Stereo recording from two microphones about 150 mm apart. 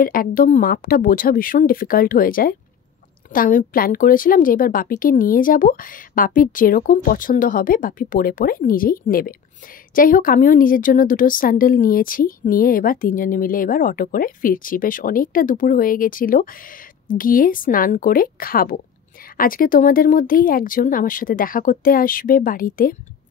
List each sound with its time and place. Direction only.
0.0 s a woman's voice: 70° left (ahead or behind)